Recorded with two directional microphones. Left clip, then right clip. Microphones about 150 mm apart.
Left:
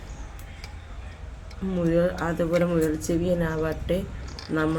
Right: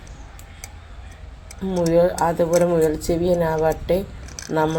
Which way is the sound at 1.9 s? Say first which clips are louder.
Right 7 dB; 15° right (ahead or behind).